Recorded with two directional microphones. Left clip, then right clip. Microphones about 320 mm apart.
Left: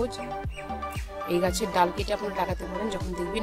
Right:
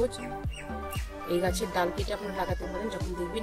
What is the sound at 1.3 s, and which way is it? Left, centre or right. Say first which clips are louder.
Speech: left 3 dB; left.